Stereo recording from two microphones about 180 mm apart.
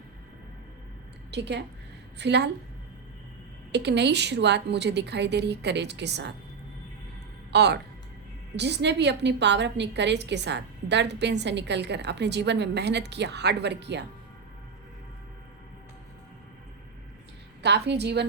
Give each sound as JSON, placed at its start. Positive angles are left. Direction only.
{"t": 1.3, "sound": "a woman's voice", "side_deg": -70}
{"t": 3.7, "sound": "a woman's voice", "side_deg": -70}
{"t": 7.5, "sound": "a woman's voice", "side_deg": -70}
{"t": 17.6, "sound": "a woman's voice", "side_deg": -70}